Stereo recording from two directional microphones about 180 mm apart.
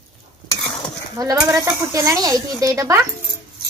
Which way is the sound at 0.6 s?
20° left (ahead or behind).